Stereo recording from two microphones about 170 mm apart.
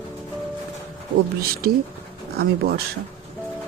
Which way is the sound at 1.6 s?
60° right (ahead or behind).